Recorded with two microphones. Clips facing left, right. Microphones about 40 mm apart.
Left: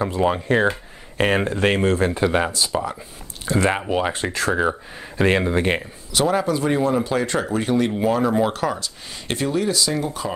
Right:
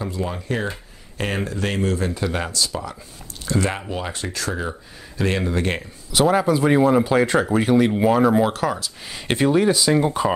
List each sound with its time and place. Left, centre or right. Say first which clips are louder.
0.0 s speech: left 7 dB; left; by 5.8 s centre
6.1 s speech: right 2 dB; centre
9.3 s speech: right 4 dB; centre